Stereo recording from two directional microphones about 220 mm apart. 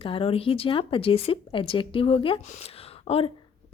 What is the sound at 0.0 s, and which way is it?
A woman's voice, 25° left (ahead or behind).